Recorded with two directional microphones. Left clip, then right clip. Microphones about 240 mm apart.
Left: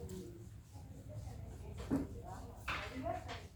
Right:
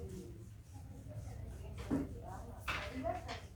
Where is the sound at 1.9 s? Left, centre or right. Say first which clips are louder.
Even; right.